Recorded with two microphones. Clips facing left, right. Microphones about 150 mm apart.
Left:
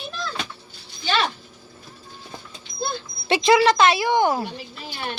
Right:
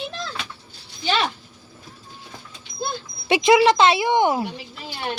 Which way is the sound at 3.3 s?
20° right (ahead or behind).